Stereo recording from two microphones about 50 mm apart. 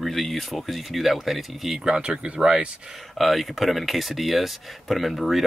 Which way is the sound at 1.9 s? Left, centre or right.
Right.